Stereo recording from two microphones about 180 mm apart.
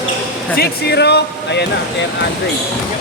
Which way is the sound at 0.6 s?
65° left (ahead or behind).